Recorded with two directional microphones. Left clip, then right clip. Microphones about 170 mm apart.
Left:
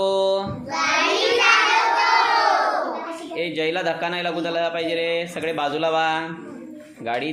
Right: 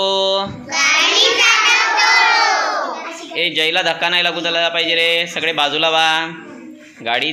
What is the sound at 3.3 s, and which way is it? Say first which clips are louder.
A man's voice: right 8 dB; 5° left (ahead or behind).